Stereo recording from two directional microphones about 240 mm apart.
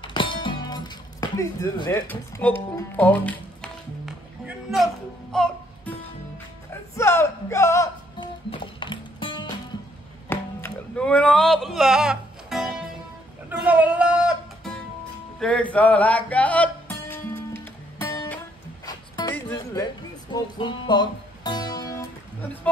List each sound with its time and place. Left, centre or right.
0.0 s music: centre
10.3 s music: centre